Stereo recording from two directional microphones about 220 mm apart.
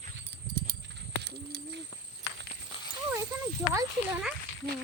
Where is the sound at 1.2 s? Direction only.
45° right (ahead or behind).